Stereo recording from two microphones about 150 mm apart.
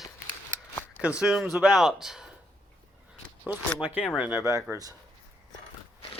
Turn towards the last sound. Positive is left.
turn(degrees=-20)  # may be behind; listen again after turning